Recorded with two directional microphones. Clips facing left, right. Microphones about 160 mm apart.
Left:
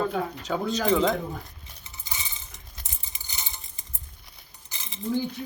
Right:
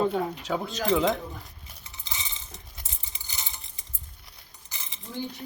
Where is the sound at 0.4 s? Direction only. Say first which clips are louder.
Left 2 dB; 5° right (ahead or behind).